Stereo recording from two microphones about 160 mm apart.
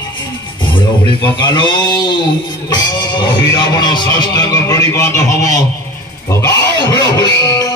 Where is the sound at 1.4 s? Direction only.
30° left (ahead or behind).